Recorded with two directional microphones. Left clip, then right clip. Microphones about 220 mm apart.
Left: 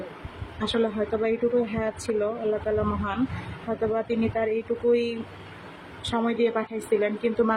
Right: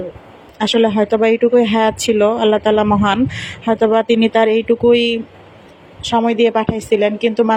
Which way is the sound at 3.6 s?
40° right (ahead or behind).